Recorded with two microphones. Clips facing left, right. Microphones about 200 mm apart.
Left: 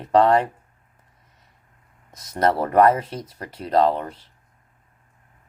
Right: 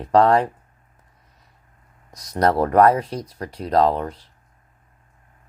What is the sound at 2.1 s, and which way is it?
Speech, 25° left (ahead or behind).